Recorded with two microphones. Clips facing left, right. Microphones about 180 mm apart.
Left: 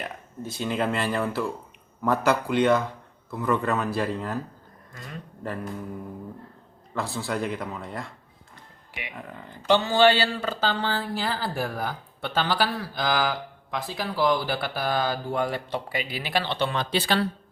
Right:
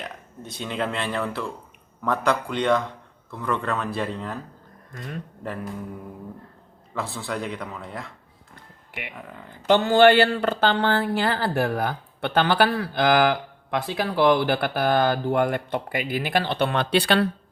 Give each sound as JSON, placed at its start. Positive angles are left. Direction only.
{"t": 0.0, "sound": "a man's voice", "side_deg": 0}
{"t": 6.9, "sound": "a man's voice", "side_deg": 0}
{"t": 9.6, "sound": "speech", "side_deg": -55}